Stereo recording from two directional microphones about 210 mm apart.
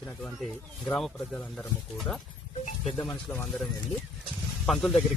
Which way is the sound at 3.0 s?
5° left (ahead or behind).